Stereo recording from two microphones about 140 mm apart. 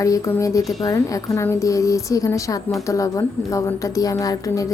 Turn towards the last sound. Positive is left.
turn(degrees=25)  # may be behind; listen again after turning